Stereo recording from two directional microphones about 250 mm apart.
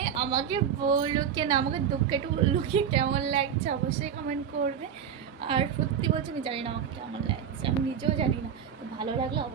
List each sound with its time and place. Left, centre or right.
0.0 s a woman's voice: centre